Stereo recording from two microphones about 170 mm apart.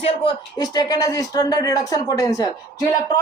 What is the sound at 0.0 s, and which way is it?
A man's voice, 30° left (ahead or behind).